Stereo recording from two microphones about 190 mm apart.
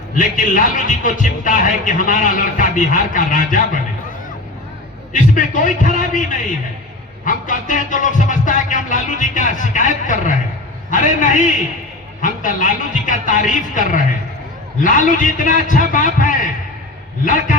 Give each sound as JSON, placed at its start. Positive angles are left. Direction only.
{"t": 0.2, "sound": "a man's voice", "side_deg": 45}
{"t": 5.1, "sound": "a man's voice", "side_deg": 45}